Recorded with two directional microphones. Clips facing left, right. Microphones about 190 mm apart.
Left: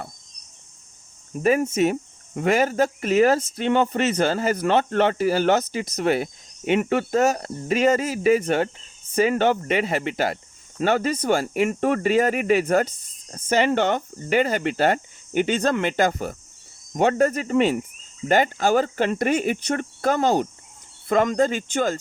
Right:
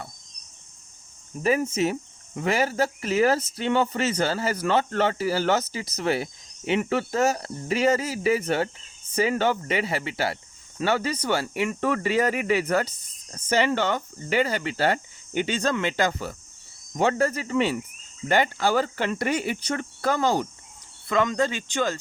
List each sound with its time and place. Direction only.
1.4 s cricket: 50° left (ahead or behind)